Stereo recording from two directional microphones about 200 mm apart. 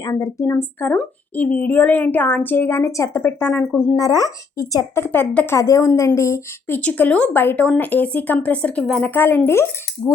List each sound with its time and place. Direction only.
0.0 s speech: 15° left (ahead or behind)